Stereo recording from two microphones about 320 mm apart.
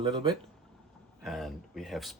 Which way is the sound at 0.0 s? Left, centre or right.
Centre.